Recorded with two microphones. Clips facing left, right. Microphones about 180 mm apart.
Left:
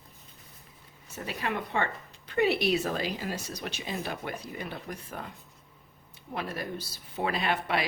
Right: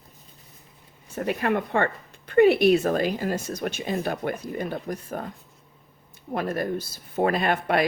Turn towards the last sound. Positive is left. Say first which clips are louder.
# right 6 dB
turn(degrees=-50)  # may be behind; listen again after turning